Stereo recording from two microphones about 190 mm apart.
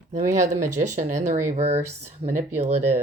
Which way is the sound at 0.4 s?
40° right (ahead or behind).